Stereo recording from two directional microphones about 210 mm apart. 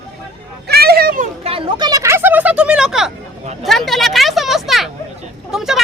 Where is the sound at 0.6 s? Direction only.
50° right (ahead or behind).